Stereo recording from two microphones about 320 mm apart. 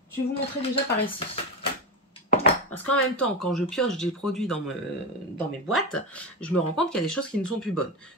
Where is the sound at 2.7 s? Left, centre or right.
Centre.